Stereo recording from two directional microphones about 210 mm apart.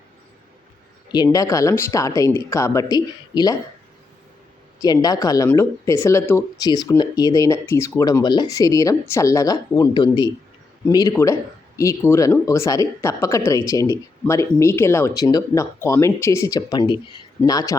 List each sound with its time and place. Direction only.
1.1 s speech: 20° left (ahead or behind)
4.8 s speech: 20° left (ahead or behind)